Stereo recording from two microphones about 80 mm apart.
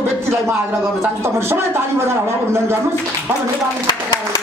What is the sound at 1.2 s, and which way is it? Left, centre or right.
A man's voice, right.